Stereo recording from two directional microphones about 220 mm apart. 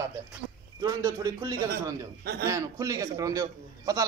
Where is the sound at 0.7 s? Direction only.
15° right (ahead or behind).